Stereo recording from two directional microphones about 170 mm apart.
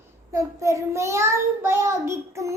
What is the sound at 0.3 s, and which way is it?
A child's voice, 15° right (ahead or behind).